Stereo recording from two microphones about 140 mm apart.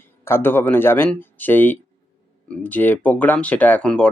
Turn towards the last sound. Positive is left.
turn(degrees=5)  # may be behind; listen again after turning